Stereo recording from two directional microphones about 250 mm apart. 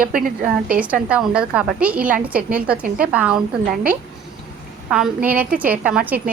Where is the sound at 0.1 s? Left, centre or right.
Right.